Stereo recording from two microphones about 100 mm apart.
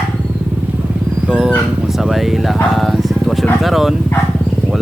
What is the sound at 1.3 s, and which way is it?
Speech, 10° right (ahead or behind).